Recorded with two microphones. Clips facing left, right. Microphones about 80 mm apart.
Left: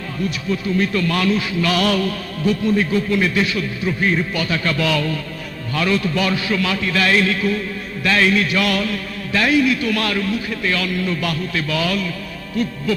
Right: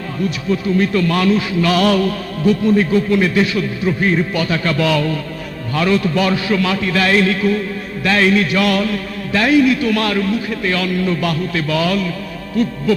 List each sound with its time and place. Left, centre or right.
0.5 s a man's voice: right